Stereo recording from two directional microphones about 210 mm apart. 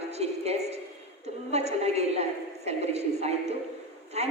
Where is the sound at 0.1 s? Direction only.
30° right (ahead or behind).